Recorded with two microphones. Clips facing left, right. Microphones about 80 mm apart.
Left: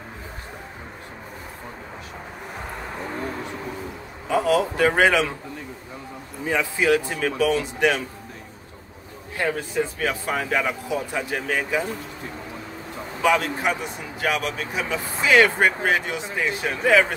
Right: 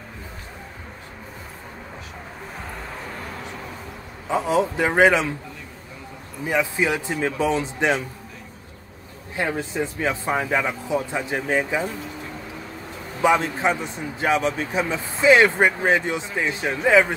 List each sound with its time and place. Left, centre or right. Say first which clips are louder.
4.3 s speech: left 1 dB; right
6.4 s speech: even; centre
9.9 s speech: right 2 dB; right
13.2 s speech: right 2 dB; right